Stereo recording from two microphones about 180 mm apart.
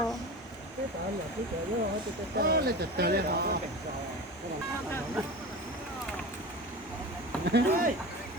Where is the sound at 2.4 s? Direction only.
60° right (ahead or behind).